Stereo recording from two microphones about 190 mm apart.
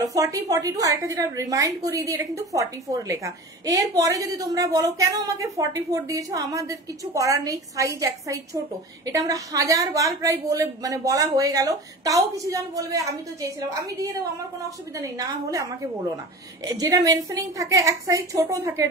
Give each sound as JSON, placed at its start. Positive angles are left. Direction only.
{"t": 0.0, "sound": "a woman's voice", "side_deg": -20}